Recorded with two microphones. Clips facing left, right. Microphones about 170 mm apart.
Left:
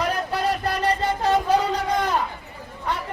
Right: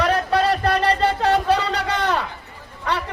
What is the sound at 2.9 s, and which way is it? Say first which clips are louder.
Speech: right 3 dB; 75° right (ahead or behind).